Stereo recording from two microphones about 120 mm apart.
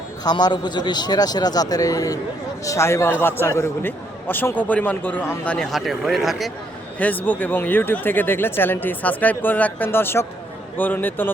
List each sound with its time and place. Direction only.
0.3 s a man's voice: 35° left (ahead or behind); by 6.5 s centre (ahead or behind)
7.3 s a man's voice: 15° left (ahead or behind)